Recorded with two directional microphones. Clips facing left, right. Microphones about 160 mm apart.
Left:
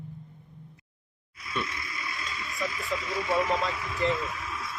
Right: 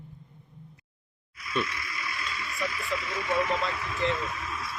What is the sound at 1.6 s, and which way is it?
Vehicle, 25° left (ahead or behind).